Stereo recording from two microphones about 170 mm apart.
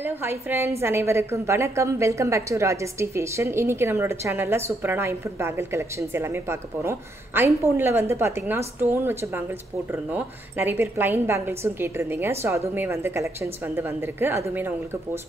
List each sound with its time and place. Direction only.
0.0 s a woman's voice: 10° right (ahead or behind)